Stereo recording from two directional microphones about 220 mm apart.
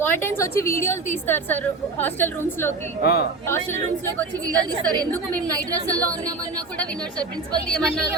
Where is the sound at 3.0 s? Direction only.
45° left (ahead or behind).